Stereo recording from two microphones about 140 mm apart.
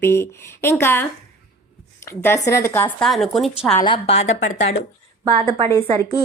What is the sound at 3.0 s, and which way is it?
Speech, centre (ahead or behind).